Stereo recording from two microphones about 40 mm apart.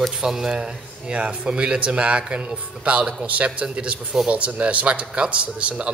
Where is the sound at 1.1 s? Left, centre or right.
Right.